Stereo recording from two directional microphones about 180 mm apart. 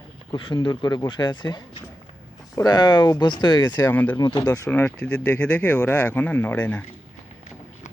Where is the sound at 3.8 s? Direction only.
10° left (ahead or behind).